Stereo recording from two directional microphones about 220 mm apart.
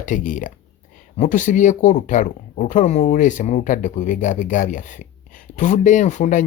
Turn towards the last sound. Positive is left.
turn(degrees=35)  # may be behind; listen again after turning